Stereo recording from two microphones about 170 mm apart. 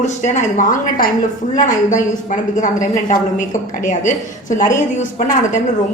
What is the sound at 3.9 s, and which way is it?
Speech, 50° left (ahead or behind).